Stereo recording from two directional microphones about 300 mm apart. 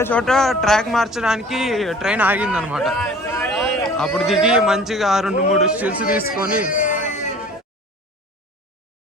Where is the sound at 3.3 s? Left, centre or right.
Centre.